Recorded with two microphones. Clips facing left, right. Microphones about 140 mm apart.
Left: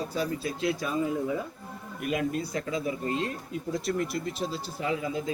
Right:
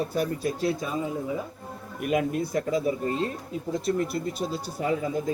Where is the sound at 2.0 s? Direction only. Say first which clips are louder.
Right 4 dB; 55° right (ahead or behind).